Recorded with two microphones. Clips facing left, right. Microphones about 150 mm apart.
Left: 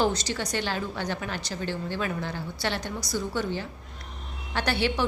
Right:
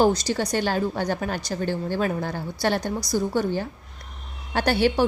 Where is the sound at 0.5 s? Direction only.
45° right (ahead or behind).